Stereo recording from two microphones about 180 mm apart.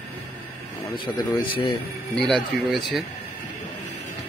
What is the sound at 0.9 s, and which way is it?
Speech, 25° left (ahead or behind).